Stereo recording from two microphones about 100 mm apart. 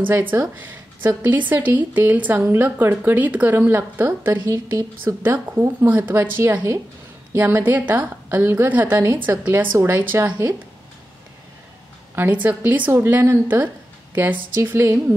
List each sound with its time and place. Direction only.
0.0 s a woman's voice: 20° right (ahead or behind)
12.2 s a woman's voice: 15° right (ahead or behind)